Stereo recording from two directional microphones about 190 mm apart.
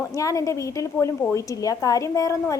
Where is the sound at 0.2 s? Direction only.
15° left (ahead or behind).